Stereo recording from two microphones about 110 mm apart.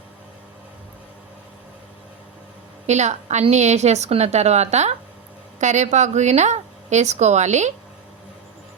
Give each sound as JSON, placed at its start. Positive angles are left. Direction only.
{"t": 2.8, "sound": "a woman's voice", "side_deg": -90}